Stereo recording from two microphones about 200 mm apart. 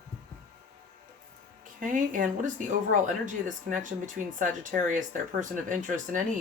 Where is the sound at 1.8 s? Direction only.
40° right (ahead or behind).